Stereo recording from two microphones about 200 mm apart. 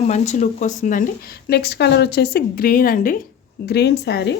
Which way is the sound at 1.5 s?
55° left (ahead or behind).